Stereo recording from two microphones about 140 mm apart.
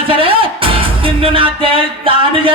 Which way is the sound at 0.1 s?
40° right (ahead or behind).